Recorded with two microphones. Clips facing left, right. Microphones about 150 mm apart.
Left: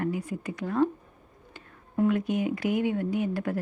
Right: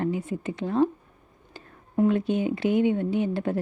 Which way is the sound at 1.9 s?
30° right (ahead or behind).